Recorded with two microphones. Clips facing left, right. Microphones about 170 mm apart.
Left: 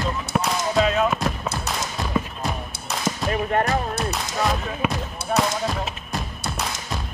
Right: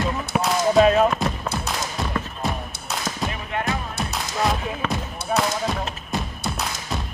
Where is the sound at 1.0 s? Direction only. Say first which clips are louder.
Right 1 dB; centre (ahead or behind).